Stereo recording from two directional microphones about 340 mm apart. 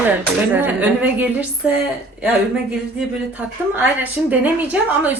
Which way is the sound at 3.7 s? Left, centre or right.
Centre.